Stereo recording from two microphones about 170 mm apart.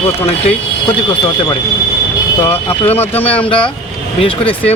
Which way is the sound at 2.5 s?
35° left (ahead or behind).